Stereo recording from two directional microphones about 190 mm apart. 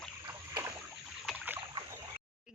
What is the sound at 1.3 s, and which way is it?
Boat, 10° right (ahead or behind).